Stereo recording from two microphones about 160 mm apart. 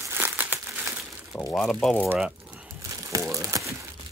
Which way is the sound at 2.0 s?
5° right (ahead or behind).